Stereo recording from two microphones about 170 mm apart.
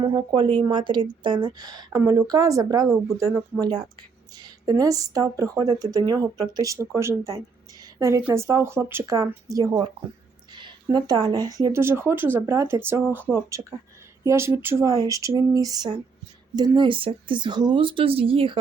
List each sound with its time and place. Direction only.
0.0 s speech: 20° right (ahead or behind)
4.4 s speech: 25° right (ahead or behind)